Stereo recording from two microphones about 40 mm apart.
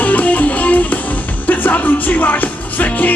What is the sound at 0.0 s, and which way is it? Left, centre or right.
Music, left.